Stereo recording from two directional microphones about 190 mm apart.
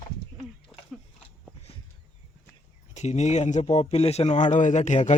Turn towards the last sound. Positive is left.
turn(degrees=40)  # may be behind; listen again after turning